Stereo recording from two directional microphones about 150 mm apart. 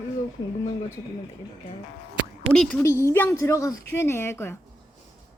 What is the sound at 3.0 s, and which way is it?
A woman's voice, 15° left (ahead or behind).